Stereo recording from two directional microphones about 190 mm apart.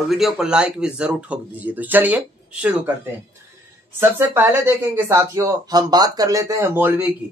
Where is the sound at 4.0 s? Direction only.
10° right (ahead or behind).